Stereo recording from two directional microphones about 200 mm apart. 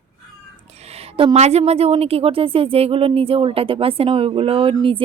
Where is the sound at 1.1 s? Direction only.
30° right (ahead or behind).